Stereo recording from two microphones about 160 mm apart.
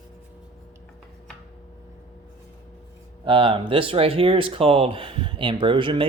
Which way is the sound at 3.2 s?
30° right (ahead or behind).